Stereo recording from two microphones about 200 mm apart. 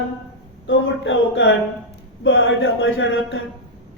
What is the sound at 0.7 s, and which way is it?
A woman's voice, 65° left (ahead or behind).